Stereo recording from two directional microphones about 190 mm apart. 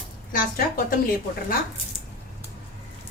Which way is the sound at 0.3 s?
50° left (ahead or behind).